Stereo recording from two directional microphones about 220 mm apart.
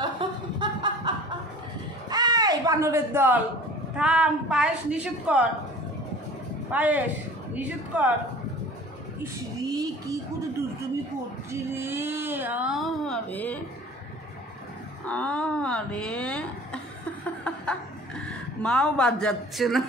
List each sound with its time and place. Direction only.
0.0 s snicker: 20° right (ahead or behind)
2.0 s a sound: 20° right (ahead or behind)
3.9 s speech: 5° right (ahead or behind)
6.7 s speech: 5° right (ahead or behind)
9.2 s speech: 15° right (ahead or behind)
11.5 s speech: 10° right (ahead or behind); by 13.6 s 5° left (ahead or behind)
15.0 s a woman's voice: 5° left (ahead or behind)